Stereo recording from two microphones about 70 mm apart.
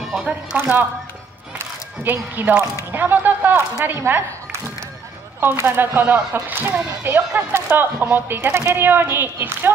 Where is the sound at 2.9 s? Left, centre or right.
Right.